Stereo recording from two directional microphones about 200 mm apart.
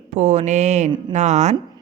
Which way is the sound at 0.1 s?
35° right (ahead or behind).